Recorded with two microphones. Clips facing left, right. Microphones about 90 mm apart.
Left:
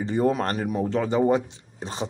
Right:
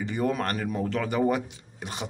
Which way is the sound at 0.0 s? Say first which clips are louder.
Left 4 dB; 30° left (ahead or behind).